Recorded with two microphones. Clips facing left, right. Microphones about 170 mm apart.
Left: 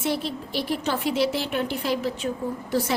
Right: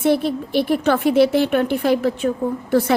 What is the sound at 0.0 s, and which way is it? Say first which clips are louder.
A woman's voice: right 9 dB; 55° right (ahead or behind).